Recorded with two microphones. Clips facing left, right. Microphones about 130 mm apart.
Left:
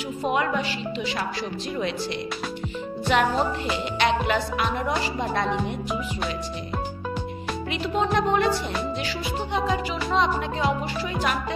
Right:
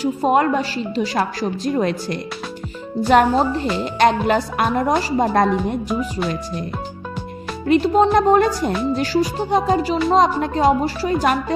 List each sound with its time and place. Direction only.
0.0 s speech: 40° right (ahead or behind)
7.6 s speech: 40° right (ahead or behind)